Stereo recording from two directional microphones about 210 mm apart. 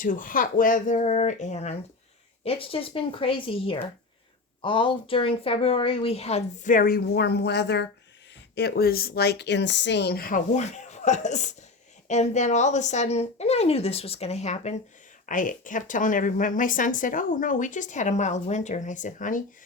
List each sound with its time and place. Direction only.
0.0 s a woman's voice: 40° left (ahead or behind)